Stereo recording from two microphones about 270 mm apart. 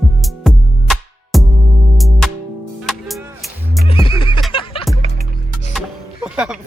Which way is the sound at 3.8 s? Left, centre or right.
Centre.